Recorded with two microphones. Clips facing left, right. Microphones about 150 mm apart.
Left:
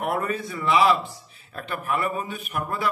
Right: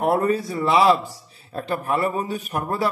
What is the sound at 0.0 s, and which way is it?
A man's voice, 35° right (ahead or behind).